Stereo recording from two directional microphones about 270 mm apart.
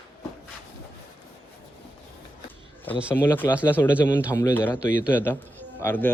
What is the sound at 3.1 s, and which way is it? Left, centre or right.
Speech, centre.